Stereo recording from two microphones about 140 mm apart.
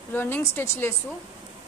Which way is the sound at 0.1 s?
15° left (ahead or behind).